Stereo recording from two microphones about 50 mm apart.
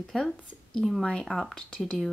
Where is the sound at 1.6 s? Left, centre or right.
Centre.